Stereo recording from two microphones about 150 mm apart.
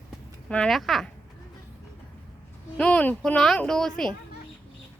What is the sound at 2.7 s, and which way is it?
Speech, 10° left (ahead or behind).